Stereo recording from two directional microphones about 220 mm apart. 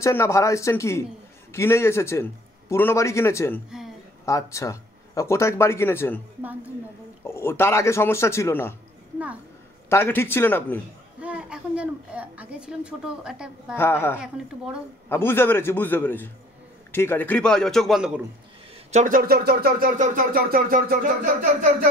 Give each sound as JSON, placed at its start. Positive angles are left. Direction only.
{"t": 0.0, "sound": "speech", "side_deg": 10}
{"t": 7.2, "sound": "speech", "side_deg": 10}
{"t": 9.8, "sound": "speech", "side_deg": 10}
{"t": 11.1, "sound": "a woman's voice", "side_deg": -5}
{"t": 13.7, "sound": "speech", "side_deg": 10}
{"t": 14.2, "sound": "a woman's voice", "side_deg": -5}
{"t": 15.0, "sound": "a woman's voice", "side_deg": 10}
{"t": 18.9, "sound": "a sound", "side_deg": -35}